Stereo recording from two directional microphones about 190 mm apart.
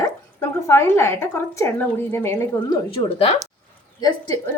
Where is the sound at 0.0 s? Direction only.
15° left (ahead or behind).